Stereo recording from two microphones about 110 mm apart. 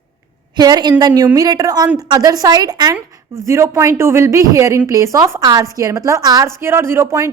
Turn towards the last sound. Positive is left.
turn(degrees=-25)  # may be behind; listen again after turning